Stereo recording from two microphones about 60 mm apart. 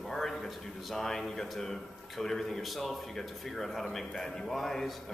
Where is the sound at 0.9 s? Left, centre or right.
Centre.